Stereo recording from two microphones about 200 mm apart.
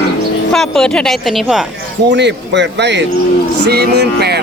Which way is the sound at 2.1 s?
60° right (ahead or behind).